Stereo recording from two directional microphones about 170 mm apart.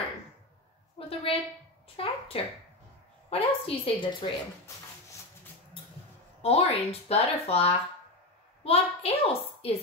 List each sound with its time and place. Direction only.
0.9 s a sound: 35° left (ahead or behind)
2.0 s speech: 35° left (ahead or behind)
6.4 s speech: 35° left (ahead or behind)